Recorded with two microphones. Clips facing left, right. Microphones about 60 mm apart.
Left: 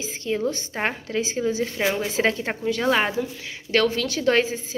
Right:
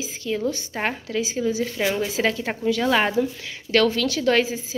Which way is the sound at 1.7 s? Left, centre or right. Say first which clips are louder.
Even; centre.